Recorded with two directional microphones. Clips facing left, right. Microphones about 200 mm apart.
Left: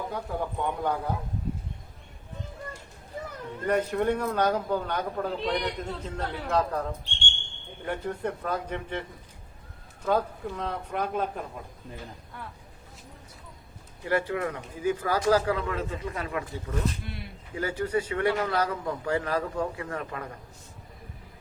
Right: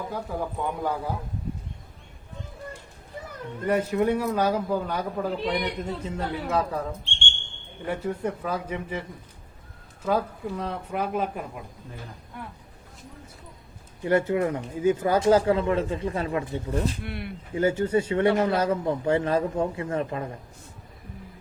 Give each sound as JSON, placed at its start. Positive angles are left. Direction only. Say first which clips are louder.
{"t": 0.1, "sound": "a man's voice", "louder": "right 1 dB", "side_deg": 0}
{"t": 3.7, "sound": "a man's voice", "louder": "right 2 dB", "side_deg": -5}
{"t": 7.9, "sound": "a man's voice", "louder": "right 3 dB", "side_deg": -5}
{"t": 10.1, "sound": "a man's voice", "louder": "right 1 dB", "side_deg": -5}
{"t": 14.0, "sound": "speech", "louder": "right 5 dB", "side_deg": -25}
{"t": 17.0, "sound": "speech", "louder": "right 5 dB", "side_deg": -60}
{"t": 17.5, "sound": "speech", "louder": "right 5 dB", "side_deg": -25}